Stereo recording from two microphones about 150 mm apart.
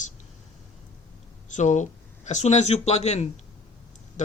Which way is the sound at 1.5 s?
55° left (ahead or behind).